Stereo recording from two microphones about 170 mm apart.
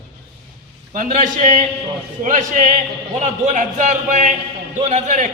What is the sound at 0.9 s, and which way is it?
A man's voice, 50° right (ahead or behind).